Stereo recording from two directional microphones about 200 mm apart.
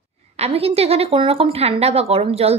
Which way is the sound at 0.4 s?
30° right (ahead or behind).